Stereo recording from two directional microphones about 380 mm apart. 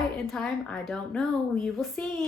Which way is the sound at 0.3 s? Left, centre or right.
Centre.